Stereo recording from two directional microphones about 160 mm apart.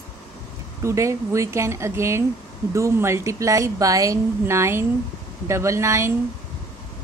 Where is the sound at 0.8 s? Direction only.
20° right (ahead or behind).